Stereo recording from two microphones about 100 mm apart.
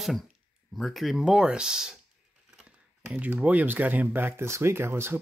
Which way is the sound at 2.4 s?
10° right (ahead or behind).